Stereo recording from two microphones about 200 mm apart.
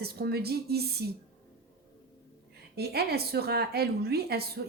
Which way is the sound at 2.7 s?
55° right (ahead or behind).